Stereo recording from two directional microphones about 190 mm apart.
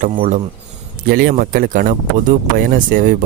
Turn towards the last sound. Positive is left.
turn(degrees=-45)  # may be behind; listen again after turning